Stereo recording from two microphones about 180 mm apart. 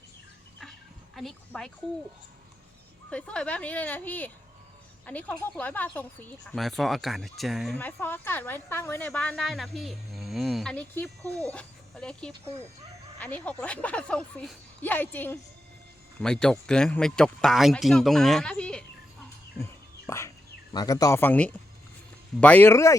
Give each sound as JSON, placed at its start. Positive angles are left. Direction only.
{"t": 1.1, "sound": "a sound", "side_deg": 0}
{"t": 3.1, "sound": "a woman's voice", "side_deg": 5}
{"t": 7.8, "sound": "a woman's voice", "side_deg": 10}
{"t": 19.5, "sound": "bird", "side_deg": 15}
{"t": 20.7, "sound": "a woman's voice", "side_deg": 20}